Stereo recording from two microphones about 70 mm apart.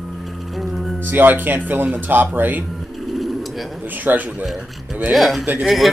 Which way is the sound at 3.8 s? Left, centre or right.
Right.